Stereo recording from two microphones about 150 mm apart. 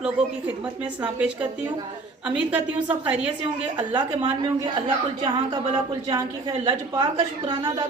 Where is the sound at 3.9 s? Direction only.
35° right (ahead or behind).